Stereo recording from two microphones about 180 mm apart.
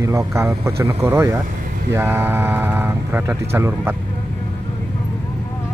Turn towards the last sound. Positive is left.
turn(degrees=-10)  # may be behind; listen again after turning